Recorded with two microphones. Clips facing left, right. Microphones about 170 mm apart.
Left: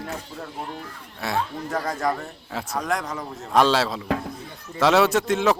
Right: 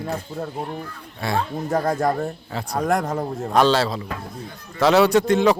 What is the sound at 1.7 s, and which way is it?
Speech, 55° right (ahead or behind).